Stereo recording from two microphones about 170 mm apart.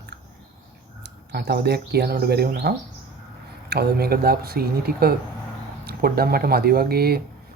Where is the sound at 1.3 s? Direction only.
70° right (ahead or behind).